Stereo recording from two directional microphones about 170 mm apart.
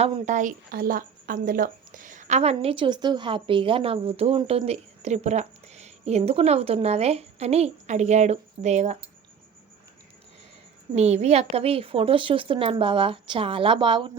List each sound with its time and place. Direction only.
0.0 s a woman's voice: 40° right (ahead or behind)
10.9 s a woman's voice: 40° right (ahead or behind)